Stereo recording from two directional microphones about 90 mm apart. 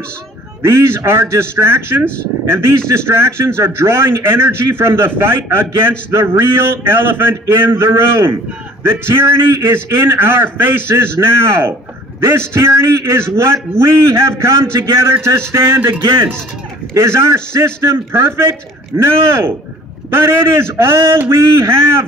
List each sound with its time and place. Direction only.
0.6 s a man's voice: 30° right (ahead or behind)
16.0 s speech: 65° right (ahead or behind)
16.9 s a man's voice: 30° right (ahead or behind)